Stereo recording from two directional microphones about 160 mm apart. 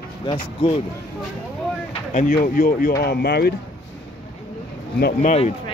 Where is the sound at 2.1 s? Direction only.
55° left (ahead or behind).